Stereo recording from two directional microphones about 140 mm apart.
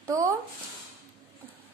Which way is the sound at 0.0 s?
25° right (ahead or behind).